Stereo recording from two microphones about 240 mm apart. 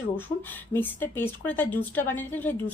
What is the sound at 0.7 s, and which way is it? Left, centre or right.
A woman's voice, centre.